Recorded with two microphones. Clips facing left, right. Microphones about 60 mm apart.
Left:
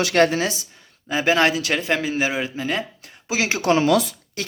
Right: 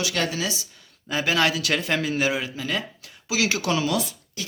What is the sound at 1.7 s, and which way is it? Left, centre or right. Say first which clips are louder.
Speech: left 2 dB; centre.